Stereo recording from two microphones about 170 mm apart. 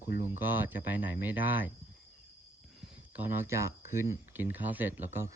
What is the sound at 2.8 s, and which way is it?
Speech, 10° right (ahead or behind).